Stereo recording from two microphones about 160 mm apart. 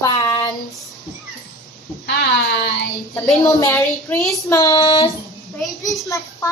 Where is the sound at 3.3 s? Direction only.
25° left (ahead or behind).